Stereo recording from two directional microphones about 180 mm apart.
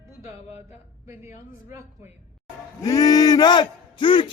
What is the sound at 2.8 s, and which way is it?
Speech, 20° left (ahead or behind).